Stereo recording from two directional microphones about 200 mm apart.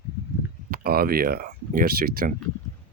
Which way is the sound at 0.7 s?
50° right (ahead or behind).